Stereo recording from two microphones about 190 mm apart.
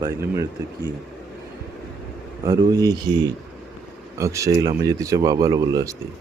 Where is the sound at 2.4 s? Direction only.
20° right (ahead or behind).